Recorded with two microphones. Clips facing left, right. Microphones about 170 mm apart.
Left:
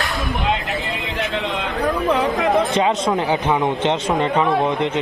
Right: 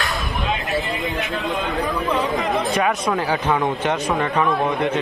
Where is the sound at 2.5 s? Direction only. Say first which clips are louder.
Left 4 dB; 20° left (ahead or behind).